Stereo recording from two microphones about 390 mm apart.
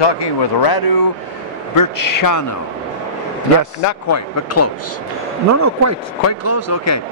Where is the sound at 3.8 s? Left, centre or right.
Left.